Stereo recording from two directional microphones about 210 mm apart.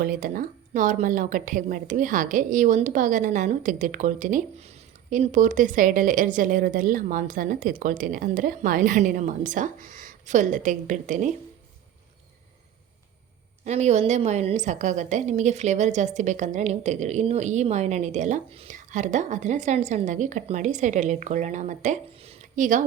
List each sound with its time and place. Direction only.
0.0 s speech: 40° right (ahead or behind)
13.7 s speech: 30° right (ahead or behind)